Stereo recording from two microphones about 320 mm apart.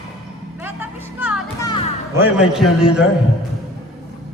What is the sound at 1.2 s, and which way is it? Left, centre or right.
Music, centre.